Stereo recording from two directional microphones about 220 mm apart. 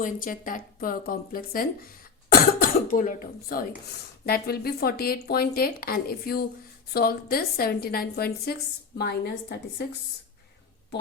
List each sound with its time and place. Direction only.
0.0 s speech: 40° left (ahead or behind)